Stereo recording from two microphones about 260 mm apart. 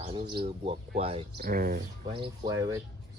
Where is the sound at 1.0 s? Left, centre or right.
Right.